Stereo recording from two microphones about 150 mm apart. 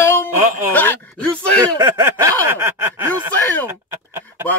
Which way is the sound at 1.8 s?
15° right (ahead or behind).